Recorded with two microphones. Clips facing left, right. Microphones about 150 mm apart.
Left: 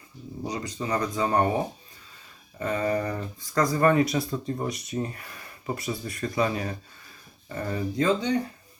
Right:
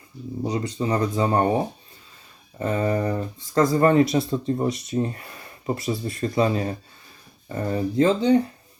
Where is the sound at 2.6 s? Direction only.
30° right (ahead or behind).